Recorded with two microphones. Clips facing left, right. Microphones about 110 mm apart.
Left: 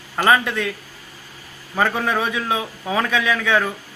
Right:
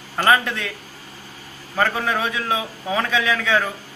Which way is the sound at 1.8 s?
Centre (ahead or behind).